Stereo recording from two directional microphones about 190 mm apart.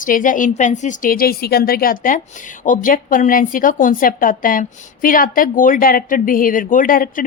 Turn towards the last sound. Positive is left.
turn(degrees=45)  # may be behind; listen again after turning